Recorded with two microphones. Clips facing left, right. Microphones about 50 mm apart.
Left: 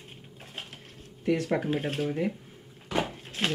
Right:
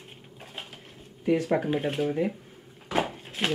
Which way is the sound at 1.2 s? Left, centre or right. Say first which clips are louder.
Right 2 dB; centre.